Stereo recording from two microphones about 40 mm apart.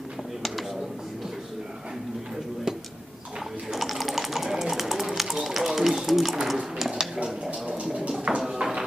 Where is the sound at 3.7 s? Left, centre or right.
Centre.